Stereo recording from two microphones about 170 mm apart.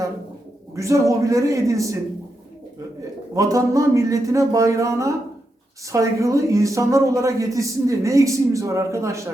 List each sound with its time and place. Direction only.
0.8 s a man's voice: 20° right (ahead or behind)
3.3 s a man's voice: 20° right (ahead or behind)